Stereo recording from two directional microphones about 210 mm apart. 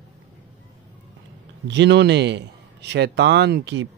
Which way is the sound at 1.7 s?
55° right (ahead or behind).